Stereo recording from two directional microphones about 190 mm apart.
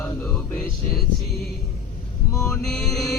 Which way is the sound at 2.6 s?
Centre (ahead or behind).